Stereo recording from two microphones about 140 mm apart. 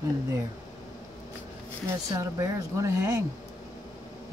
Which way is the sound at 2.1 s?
20° right (ahead or behind).